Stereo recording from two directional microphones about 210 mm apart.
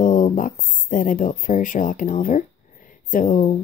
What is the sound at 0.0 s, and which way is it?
Speech, 40° left (ahead or behind).